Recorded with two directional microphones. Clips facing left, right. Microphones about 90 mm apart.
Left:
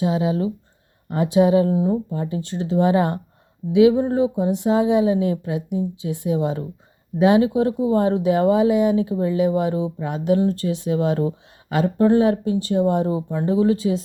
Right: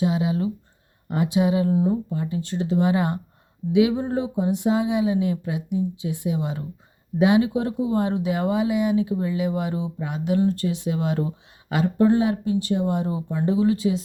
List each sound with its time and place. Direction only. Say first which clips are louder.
0.0 s speech: left 2 dB; 30° left (ahead or behind)